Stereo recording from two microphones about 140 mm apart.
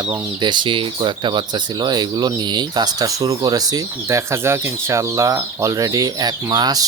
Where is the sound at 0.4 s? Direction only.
35° right (ahead or behind).